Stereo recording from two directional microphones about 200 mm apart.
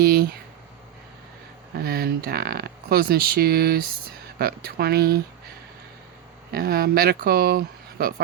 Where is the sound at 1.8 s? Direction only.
50° right (ahead or behind).